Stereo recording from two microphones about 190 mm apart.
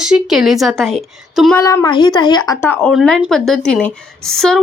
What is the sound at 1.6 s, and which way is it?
A woman's voice, 15° left (ahead or behind).